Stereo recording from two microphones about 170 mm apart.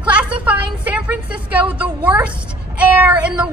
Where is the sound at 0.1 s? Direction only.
10° right (ahead or behind).